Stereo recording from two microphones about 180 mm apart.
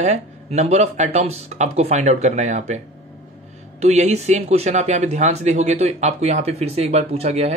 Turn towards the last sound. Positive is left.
turn(degrees=-35)  # may be behind; listen again after turning